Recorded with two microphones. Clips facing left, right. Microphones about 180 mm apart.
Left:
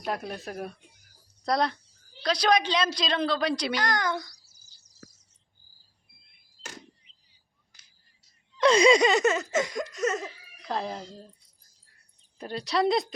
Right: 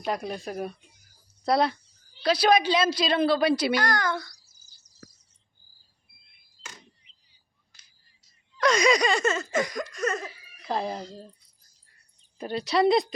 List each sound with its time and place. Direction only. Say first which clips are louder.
0.0 s a woman's voice: right 2 dB; centre (ahead or behind)
3.8 s a child's voice: right 1 dB; 20° left (ahead or behind)
7.7 s a sound: right 1 dB; 15° left (ahead or behind)
8.6 s laughter: left 3 dB; 30° left (ahead or behind)
10.2 s speech: right 2 dB; 5° right (ahead or behind)
12.4 s a woman's voice: right 3 dB; centre (ahead or behind)